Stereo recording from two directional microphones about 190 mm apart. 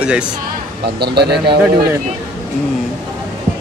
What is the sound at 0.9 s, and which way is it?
Speech, 60° right (ahead or behind).